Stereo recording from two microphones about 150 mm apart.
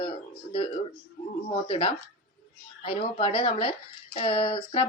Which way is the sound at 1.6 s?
35° left (ahead or behind).